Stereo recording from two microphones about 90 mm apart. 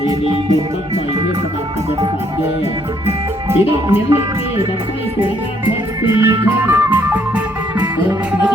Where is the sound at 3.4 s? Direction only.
30° right (ahead or behind).